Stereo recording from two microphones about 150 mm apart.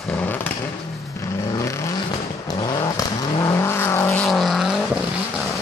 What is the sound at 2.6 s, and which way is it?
Vehicle, 30° left (ahead or behind).